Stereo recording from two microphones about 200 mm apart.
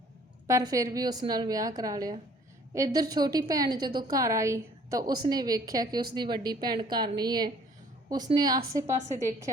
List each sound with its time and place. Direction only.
0.4 s a woman's voice: 15° right (ahead or behind)